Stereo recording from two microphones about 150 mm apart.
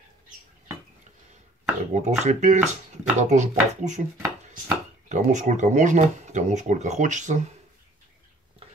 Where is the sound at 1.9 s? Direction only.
50° right (ahead or behind).